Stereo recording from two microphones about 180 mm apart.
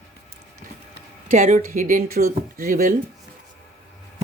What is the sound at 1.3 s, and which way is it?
A woman's voice, 45° right (ahead or behind).